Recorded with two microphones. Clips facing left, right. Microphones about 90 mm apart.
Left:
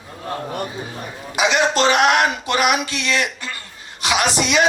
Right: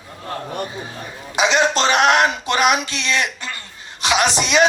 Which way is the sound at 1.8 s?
25° right (ahead or behind).